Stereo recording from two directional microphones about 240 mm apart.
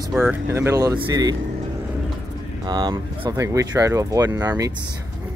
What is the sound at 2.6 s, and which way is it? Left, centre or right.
Speech, centre.